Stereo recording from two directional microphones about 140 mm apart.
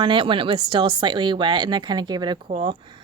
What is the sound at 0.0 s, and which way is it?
A woman's voice, 35° right (ahead or behind).